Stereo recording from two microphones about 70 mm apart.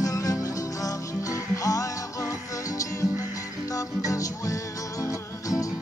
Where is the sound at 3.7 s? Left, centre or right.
Left.